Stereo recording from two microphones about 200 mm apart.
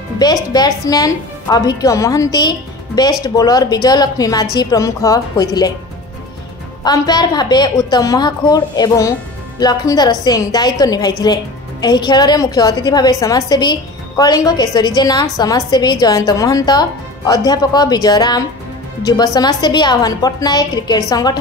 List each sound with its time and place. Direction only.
0.2 s a woman's voice: 20° left (ahead or behind)
6.8 s a woman's voice: 20° left (ahead or behind)